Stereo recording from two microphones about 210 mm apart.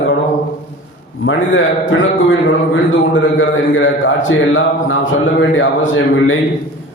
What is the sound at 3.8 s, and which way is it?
A man's voice, 65° left (ahead or behind).